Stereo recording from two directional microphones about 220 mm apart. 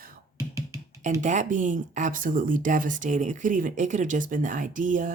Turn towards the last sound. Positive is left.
turn(degrees=-35)  # may be behind; listen again after turning